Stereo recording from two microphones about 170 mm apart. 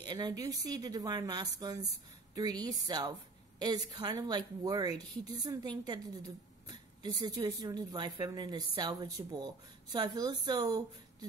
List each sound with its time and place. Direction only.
0.0 s a woman's voice: 25° right (ahead or behind)